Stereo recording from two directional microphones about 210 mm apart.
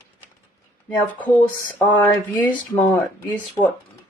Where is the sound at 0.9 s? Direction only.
10° left (ahead or behind).